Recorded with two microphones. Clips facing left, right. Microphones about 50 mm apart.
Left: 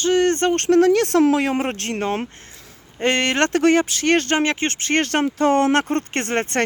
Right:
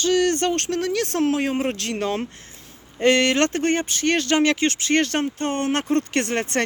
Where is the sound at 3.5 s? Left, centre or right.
Left.